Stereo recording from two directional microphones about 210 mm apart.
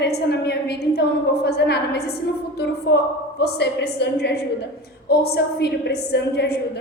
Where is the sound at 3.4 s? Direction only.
55° left (ahead or behind).